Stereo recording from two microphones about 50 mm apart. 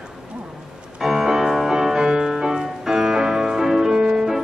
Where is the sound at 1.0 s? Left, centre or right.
Centre.